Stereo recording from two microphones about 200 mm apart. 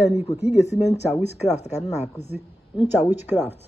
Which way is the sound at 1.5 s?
35° left (ahead or behind).